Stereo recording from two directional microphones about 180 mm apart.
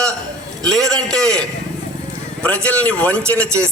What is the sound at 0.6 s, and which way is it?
A man's voice, 5° left (ahead or behind).